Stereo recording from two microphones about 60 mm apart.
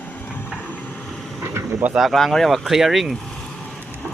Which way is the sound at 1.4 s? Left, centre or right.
Right.